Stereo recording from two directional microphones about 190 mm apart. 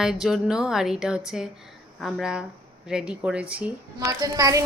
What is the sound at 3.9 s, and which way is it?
Speech, 20° right (ahead or behind).